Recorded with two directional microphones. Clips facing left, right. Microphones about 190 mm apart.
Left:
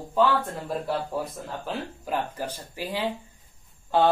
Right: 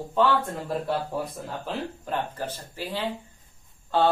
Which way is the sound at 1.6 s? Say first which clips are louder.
Right 1 dB; centre (ahead or behind).